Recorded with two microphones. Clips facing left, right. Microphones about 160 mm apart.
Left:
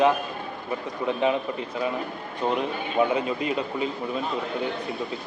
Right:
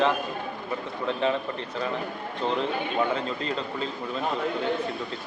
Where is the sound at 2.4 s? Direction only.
15° left (ahead or behind).